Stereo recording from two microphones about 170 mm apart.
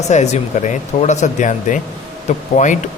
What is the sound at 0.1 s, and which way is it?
Speech, 40° left (ahead or behind).